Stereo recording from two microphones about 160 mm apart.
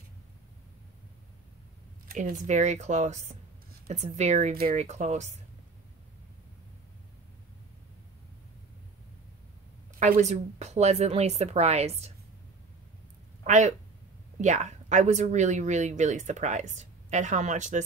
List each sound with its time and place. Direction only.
2.0 s speech: 60° right (ahead or behind)
9.9 s speech: 55° right (ahead or behind)
13.4 s speech: 50° right (ahead or behind)